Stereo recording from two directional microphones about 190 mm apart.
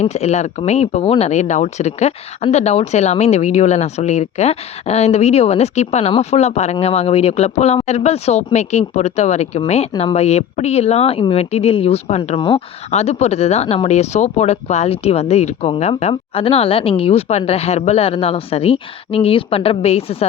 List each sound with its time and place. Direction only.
0.0 s speech: 35° left (ahead or behind)